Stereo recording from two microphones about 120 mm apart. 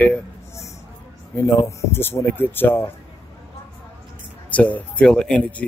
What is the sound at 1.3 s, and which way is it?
Speech, 20° left (ahead or behind).